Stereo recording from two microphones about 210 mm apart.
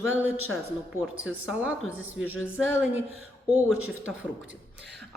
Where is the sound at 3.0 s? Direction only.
80° right.